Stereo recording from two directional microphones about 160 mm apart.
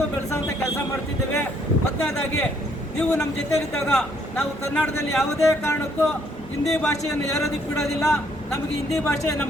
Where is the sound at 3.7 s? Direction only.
5° left (ahead or behind).